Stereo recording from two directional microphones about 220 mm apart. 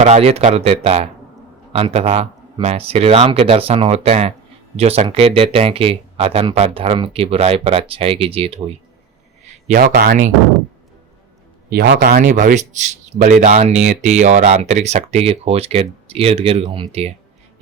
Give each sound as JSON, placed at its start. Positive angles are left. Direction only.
{"t": 0.0, "sound": "speech", "side_deg": -30}
{"t": 9.6, "sound": "speech", "side_deg": -40}
{"t": 11.7, "sound": "speech", "side_deg": -45}
{"t": 12.1, "sound": "speech", "side_deg": -35}